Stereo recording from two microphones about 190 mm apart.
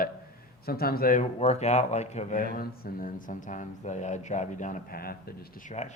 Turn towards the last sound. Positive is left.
turn(degrees=50)  # may be behind; listen again after turning